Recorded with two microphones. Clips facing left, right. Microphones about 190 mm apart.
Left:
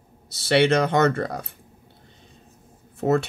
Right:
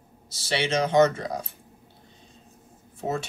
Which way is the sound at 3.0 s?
60° left (ahead or behind).